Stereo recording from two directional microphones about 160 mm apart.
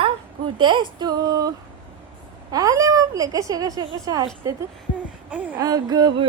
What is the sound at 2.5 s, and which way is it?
Speech, 20° right (ahead or behind).